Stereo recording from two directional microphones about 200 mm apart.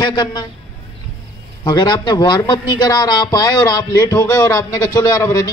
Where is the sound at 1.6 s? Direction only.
20° left (ahead or behind).